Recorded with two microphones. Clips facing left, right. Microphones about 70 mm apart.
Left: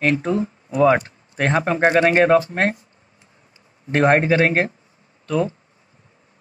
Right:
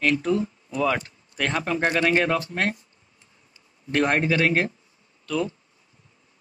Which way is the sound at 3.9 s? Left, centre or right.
Left.